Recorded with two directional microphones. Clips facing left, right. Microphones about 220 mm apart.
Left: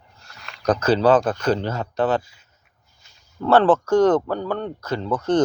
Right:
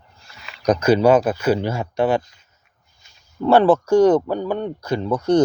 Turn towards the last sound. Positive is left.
turn(degrees=-10)  # may be behind; listen again after turning